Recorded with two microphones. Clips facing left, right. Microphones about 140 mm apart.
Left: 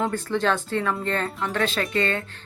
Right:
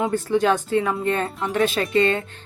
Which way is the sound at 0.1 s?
15° right (ahead or behind).